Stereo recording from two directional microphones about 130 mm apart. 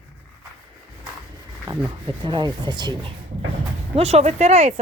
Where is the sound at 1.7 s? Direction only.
30° right (ahead or behind).